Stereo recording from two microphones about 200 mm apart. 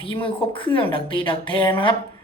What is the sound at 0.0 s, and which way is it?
A woman's voice, 25° left (ahead or behind).